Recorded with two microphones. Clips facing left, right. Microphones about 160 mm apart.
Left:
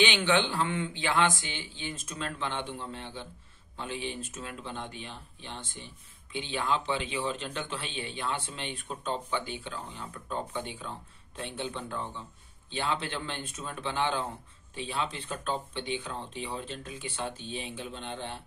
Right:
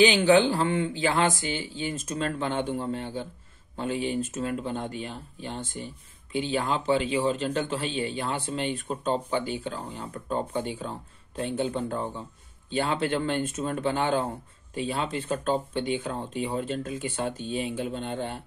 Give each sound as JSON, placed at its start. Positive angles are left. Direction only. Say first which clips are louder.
{"t": 0.0, "sound": "a man's voice", "louder": "right 7 dB", "side_deg": -40}